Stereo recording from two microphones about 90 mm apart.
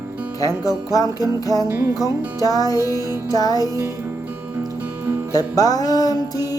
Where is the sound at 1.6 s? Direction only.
30° right (ahead or behind).